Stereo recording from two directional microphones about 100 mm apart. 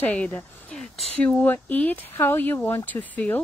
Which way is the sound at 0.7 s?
5° left (ahead or behind).